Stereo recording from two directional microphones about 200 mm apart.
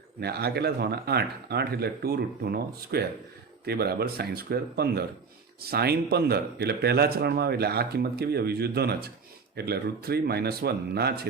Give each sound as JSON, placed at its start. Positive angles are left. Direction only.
{"t": 0.2, "sound": "a man's voice", "side_deg": -55}